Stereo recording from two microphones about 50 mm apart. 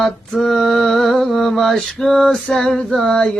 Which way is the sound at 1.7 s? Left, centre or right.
Centre.